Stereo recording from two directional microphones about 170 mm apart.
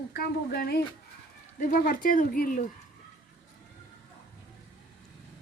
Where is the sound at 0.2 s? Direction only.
65° left (ahead or behind).